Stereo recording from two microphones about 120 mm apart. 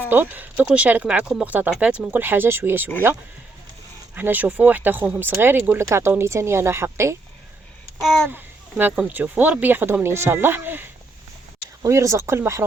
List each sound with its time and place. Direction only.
0.1 s speech: 15° right (ahead or behind)
4.1 s speech: 15° right (ahead or behind)
8.0 s a child's voice: centre (ahead or behind)
8.8 s speech: 15° right (ahead or behind)